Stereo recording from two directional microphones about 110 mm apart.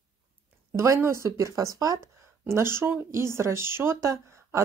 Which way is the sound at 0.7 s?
25° right (ahead or behind).